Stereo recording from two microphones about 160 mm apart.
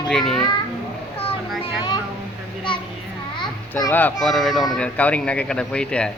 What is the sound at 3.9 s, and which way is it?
A man's voice, 5° left (ahead or behind).